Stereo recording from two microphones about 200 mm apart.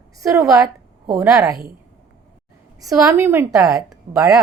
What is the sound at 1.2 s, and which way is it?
Speech, centre (ahead or behind).